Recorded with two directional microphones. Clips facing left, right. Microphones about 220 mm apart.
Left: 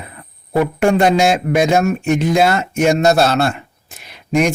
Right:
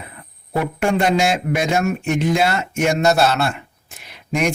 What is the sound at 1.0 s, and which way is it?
Speech, 40° left (ahead or behind).